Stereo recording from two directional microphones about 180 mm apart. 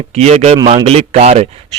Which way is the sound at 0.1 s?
35° right (ahead or behind).